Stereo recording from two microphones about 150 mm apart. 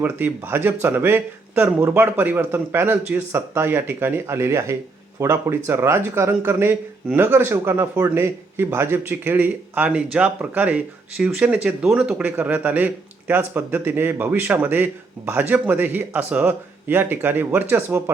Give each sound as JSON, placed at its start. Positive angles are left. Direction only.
{"t": 0.0, "sound": "a man's voice", "side_deg": -15}